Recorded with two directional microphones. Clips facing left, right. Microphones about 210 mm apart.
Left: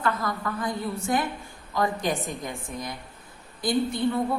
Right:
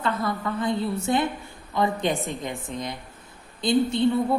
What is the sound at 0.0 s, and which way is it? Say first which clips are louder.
A woman's voice: right 1 dB; 25° right (ahead or behind).